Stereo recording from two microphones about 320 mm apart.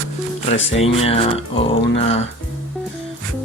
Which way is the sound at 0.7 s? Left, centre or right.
Centre.